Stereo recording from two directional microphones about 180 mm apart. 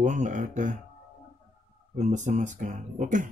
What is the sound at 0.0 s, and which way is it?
Speech, 45° right (ahead or behind).